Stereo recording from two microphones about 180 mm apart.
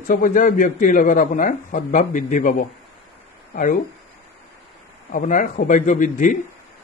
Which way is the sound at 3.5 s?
50° left (ahead or behind).